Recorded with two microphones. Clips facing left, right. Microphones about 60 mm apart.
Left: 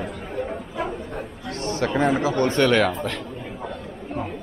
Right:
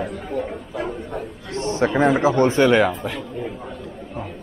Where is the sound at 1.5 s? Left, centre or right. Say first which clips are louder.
Right 4 dB; right.